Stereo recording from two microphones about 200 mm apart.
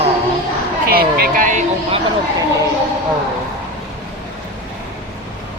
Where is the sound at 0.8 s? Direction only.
50° right (ahead or behind).